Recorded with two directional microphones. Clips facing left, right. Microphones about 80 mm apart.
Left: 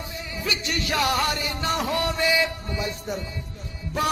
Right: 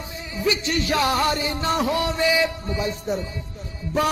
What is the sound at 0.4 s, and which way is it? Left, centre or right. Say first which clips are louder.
Music: right 6 dB; right.